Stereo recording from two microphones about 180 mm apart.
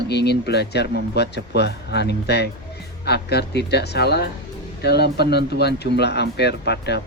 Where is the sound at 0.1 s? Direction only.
70° left (ahead or behind).